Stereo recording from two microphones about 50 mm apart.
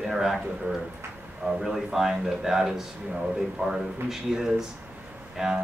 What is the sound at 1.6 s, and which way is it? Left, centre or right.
Speech, centre.